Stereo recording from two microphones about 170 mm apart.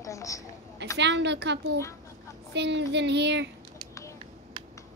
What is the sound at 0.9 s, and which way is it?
Child singing, 90° right.